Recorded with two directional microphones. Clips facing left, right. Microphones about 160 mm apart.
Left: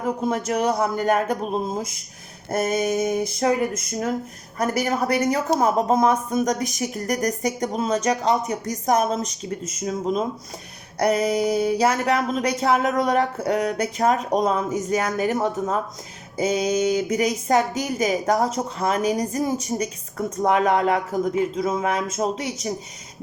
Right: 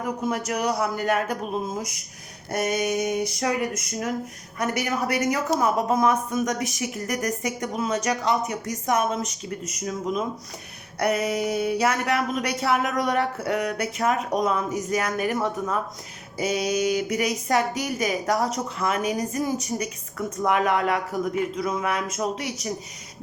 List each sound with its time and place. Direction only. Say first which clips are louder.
0.3 s a woman's voice: left 3 dB; 30° left (ahead or behind)